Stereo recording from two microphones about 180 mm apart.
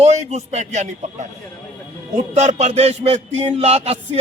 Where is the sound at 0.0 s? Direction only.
40° right (ahead or behind).